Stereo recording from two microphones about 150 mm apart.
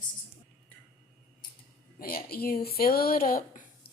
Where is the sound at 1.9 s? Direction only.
85° left; by 3.6 s 65° left (ahead or behind).